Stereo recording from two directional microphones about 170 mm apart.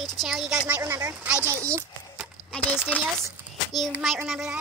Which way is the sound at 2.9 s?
5° left (ahead or behind).